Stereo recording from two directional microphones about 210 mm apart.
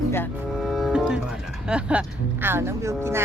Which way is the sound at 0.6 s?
Centre (ahead or behind).